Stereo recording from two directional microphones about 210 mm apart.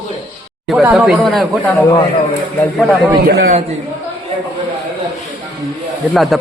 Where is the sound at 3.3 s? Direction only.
45° right (ahead or behind).